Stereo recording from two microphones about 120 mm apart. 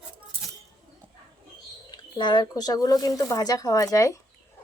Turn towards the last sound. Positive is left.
turn(degrees=25)  # may be behind; listen again after turning